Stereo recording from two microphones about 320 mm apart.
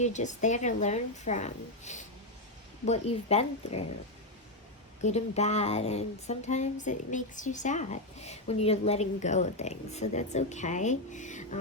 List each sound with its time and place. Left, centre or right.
0.0 s speech: left
5.0 s speech: centre